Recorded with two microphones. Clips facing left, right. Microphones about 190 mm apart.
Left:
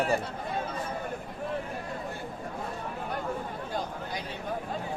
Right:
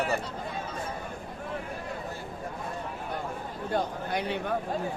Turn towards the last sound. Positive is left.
turn(degrees=-60)  # may be behind; listen again after turning